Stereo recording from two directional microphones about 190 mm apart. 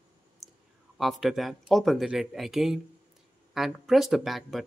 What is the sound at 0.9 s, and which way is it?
Speech, centre (ahead or behind).